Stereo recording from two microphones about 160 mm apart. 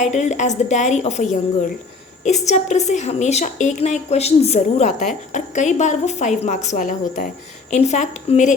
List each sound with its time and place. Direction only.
0.0 s a woman's voice: 45° left (ahead or behind)